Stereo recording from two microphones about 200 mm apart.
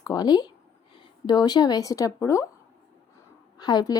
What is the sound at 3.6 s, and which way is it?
Speech, 20° left (ahead or behind).